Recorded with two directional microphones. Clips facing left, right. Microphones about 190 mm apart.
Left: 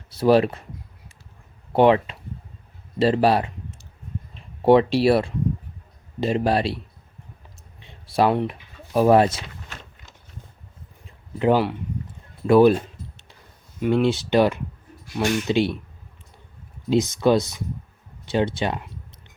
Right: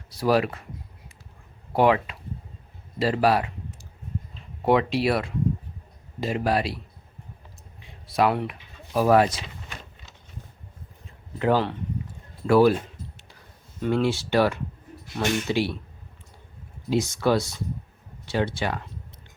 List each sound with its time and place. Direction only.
0.1 s speech: 25° left (ahead or behind)
1.7 s speech: 25° left (ahead or behind)
4.6 s speech: 30° left (ahead or behind)
7.8 s speech: 25° left (ahead or behind)
11.3 s speech: 15° left (ahead or behind)
13.7 s speech: 15° left (ahead or behind)
16.9 s speech: 20° left (ahead or behind)